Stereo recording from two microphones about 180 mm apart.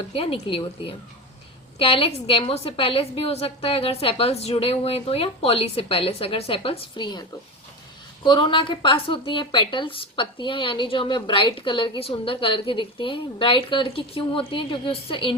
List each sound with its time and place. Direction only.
0.1 s a woman's voice: 30° left (ahead or behind)